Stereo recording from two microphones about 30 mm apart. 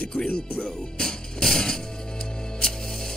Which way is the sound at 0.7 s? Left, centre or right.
Left.